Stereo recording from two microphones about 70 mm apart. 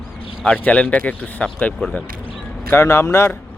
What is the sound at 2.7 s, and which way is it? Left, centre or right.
Speech, left.